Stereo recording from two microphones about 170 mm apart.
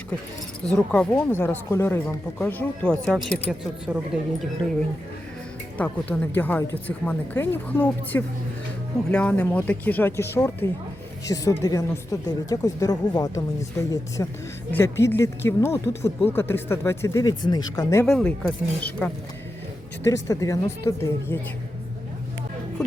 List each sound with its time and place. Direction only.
0.6 s a woman's voice: 5° left (ahead or behind)
5.7 s speech: 10° left (ahead or behind)
18.0 s speech: 5° left (ahead or behind)
20.1 s speech: 20° left (ahead or behind)